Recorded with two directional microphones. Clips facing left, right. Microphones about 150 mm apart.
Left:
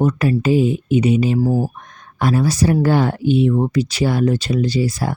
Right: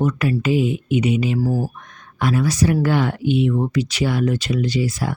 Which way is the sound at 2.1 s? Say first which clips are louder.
Left 2 dB; 35° left (ahead or behind).